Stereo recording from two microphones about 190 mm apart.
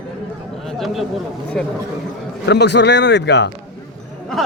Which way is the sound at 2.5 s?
60° left (ahead or behind).